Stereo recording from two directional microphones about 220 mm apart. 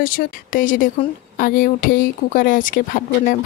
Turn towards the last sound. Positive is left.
turn(degrees=40)  # may be behind; listen again after turning